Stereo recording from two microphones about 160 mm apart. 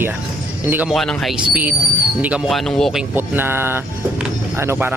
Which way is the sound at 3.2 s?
15° right (ahead or behind).